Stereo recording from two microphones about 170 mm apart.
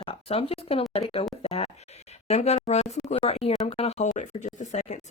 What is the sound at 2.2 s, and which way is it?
Speech, 40° left (ahead or behind).